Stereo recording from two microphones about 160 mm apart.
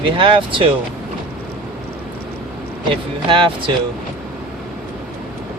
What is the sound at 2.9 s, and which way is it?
Speech, 30° right (ahead or behind).